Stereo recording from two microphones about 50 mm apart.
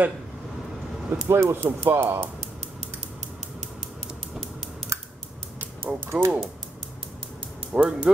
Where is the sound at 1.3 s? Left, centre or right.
Right.